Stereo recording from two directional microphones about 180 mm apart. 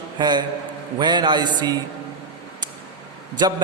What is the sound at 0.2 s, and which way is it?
A man's voice, 25° right (ahead or behind).